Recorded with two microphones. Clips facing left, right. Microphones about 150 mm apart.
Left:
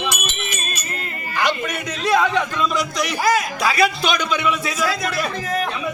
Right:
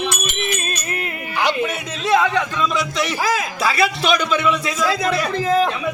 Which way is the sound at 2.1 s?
Centre (ahead or behind).